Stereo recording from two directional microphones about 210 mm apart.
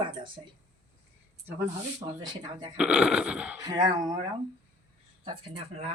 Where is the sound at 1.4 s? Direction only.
10° right (ahead or behind).